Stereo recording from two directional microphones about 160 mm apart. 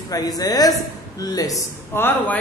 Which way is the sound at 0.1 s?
25° left (ahead or behind).